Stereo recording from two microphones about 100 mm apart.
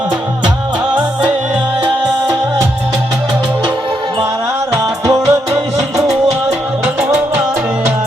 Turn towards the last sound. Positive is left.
turn(degrees=-10)  # may be behind; listen again after turning